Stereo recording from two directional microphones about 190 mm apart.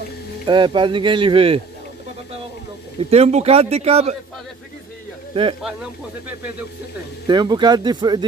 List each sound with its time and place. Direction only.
0.5 s speech: 25° right (ahead or behind)
3.0 s a man's voice: 35° right (ahead or behind)
5.3 s speech: 30° right (ahead or behind)
7.2 s speech: 20° right (ahead or behind)